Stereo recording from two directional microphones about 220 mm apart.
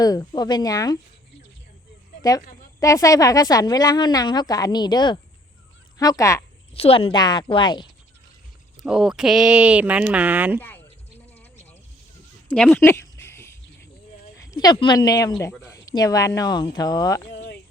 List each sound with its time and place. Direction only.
0.0 s a woman's voice: 15° left (ahead or behind)
2.8 s a woman's voice: 15° left (ahead or behind)
6.7 s a woman's voice: 25° left (ahead or behind)
8.8 s speech: 5° right (ahead or behind)
12.5 s a sound: 5° left (ahead or behind)
14.3 s a woman's voice: 15° left (ahead or behind)